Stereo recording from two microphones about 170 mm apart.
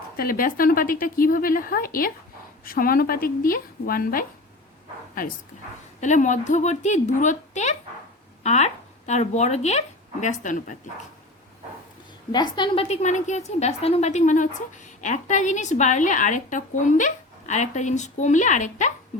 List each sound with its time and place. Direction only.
0.2 s speech: 55° left (ahead or behind)
6.0 s a woman's voice: 45° left (ahead or behind)
12.3 s a woman's voice: 25° left (ahead or behind); by 18.9 s 45° left (ahead or behind)